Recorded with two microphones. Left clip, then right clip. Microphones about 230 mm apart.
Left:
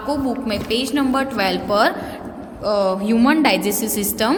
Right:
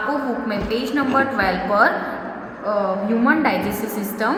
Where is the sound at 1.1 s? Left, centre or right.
Left.